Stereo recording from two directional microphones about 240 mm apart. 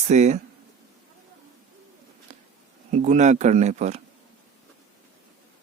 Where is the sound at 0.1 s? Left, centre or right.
Right.